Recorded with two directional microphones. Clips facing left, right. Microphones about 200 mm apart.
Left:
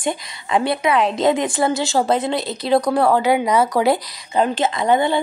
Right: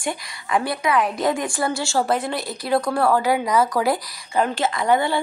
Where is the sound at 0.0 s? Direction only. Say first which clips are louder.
Left 4 dB; 20° left (ahead or behind).